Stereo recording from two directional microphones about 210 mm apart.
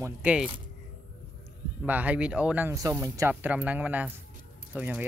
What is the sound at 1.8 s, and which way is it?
Speech, 5° right (ahead or behind).